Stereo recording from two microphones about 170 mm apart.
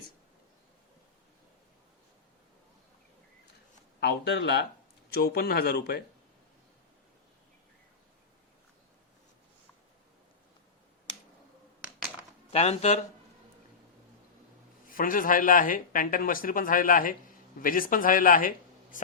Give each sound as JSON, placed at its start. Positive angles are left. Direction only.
{"t": 4.0, "sound": "speech", "side_deg": 70}
{"t": 5.1, "sound": "speech", "side_deg": 65}
{"t": 12.5, "sound": "speech", "side_deg": 40}
{"t": 14.8, "sound": "speech", "side_deg": 55}